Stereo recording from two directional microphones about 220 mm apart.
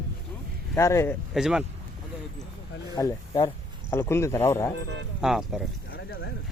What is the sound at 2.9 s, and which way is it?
Speech, 15° left (ahead or behind).